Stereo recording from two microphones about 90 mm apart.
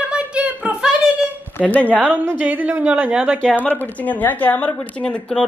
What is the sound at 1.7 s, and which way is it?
Speech, 15° left (ahead or behind).